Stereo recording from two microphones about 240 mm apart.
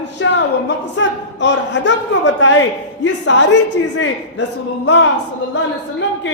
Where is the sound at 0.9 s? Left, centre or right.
Left.